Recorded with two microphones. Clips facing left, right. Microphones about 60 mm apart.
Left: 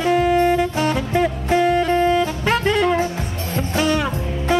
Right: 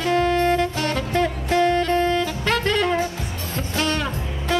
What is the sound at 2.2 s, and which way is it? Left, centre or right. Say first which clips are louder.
Music: left 3 dB; centre.